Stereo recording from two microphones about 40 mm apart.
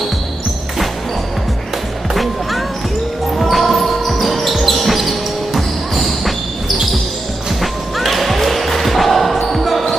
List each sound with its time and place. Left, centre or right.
3.3 s basketball bounce: centre
7.6 s music: centre